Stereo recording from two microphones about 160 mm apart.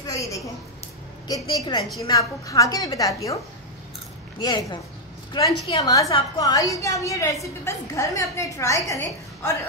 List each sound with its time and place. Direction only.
0.0 s a sound: 20° left (ahead or behind)
1.2 s a woman's voice: 25° left (ahead or behind)
4.4 s a woman's voice: 25° left (ahead or behind)